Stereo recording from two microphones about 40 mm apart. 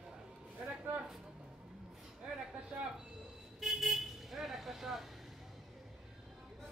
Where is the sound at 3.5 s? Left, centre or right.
Centre.